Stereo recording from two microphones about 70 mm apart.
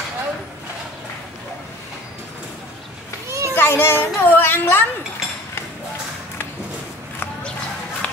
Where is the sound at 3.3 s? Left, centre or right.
Right.